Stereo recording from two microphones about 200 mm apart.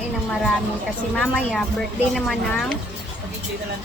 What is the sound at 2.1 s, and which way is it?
Speech, centre (ahead or behind).